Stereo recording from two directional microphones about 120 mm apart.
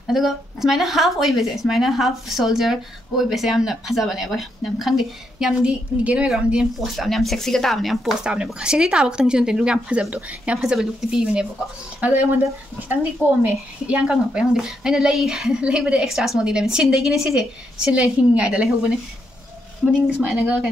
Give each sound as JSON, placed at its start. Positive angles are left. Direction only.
{"t": 0.0, "sound": "speech", "side_deg": 0}